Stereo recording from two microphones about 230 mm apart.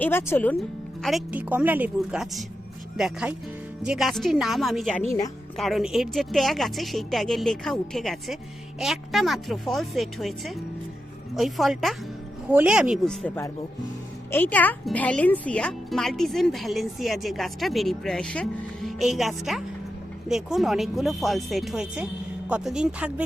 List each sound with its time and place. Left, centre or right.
0.0 s speech: centre
1.0 s speech: centre